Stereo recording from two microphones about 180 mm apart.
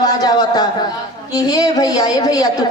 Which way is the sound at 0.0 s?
20° left (ahead or behind).